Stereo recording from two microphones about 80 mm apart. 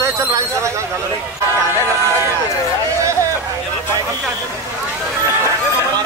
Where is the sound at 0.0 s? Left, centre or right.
Right.